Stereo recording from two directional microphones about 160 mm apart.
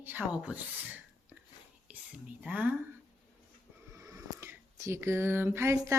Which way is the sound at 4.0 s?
20° right (ahead or behind).